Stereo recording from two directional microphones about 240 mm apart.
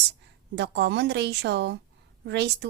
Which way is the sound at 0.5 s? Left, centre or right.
Right.